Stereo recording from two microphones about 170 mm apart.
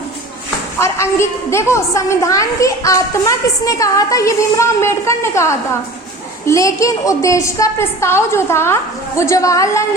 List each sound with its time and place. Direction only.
0.8 s a woman's voice: 15° left (ahead or behind)